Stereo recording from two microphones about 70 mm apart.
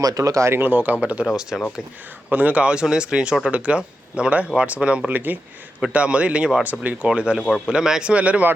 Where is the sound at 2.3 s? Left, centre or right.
Right.